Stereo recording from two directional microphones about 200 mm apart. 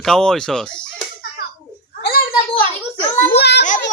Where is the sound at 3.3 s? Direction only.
55° left (ahead or behind).